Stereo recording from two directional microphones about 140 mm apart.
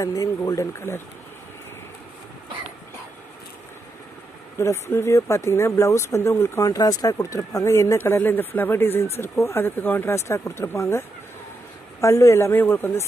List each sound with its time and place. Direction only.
0.0 s speech: 25° left (ahead or behind)
4.6 s speech: 20° left (ahead or behind)